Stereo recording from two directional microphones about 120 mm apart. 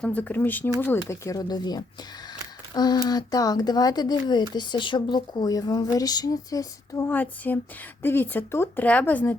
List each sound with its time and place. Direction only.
0.0 s speech: 15° left (ahead or behind); by 7.1 s 30° left (ahead or behind)
7.1 s speech: 15° left (ahead or behind)